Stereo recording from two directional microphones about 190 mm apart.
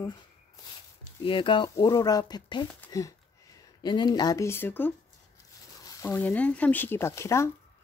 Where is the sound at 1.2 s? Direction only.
25° left (ahead or behind).